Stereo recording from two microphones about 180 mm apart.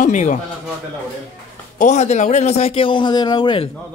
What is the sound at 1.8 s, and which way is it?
A man's voice, 40° left (ahead or behind).